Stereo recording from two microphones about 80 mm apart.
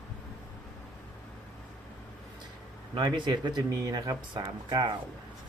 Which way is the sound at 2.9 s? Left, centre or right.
Right.